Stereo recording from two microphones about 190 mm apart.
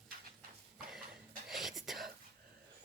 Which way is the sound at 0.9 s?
5° right (ahead or behind).